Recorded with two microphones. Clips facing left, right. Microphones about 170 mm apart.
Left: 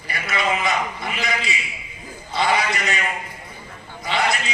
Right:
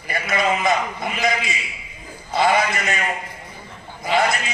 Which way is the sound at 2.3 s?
50° right (ahead or behind).